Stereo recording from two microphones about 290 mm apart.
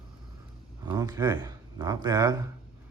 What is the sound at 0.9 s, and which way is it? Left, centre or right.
Speech, centre.